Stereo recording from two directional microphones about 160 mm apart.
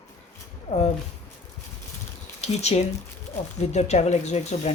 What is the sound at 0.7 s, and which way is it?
Speech, 45° left (ahead or behind).